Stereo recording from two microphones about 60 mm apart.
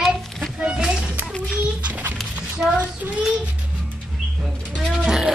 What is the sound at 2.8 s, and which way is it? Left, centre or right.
Child singing, right.